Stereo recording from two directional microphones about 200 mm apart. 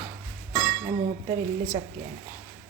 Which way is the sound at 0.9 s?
15° right (ahead or behind).